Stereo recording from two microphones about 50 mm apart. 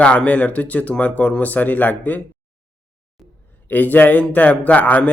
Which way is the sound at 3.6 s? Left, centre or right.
Left.